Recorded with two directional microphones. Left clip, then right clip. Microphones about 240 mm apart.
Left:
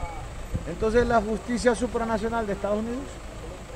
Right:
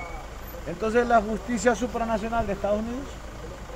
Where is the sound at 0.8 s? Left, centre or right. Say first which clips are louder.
Right 1 dB; centre.